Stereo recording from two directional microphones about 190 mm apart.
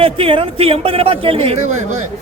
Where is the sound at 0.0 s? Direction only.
30° right (ahead or behind).